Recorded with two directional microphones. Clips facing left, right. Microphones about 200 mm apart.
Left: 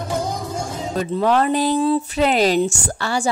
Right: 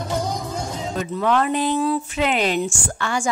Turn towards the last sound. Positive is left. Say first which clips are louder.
# left 2 dB
turn(degrees=35)  # may be behind; listen again after turning